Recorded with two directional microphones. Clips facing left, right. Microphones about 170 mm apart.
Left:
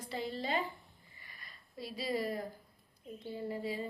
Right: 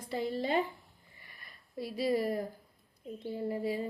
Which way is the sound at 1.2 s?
55° right (ahead or behind).